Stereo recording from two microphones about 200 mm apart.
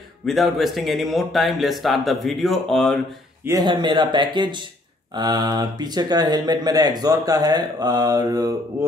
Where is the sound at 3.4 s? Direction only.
20° right (ahead or behind).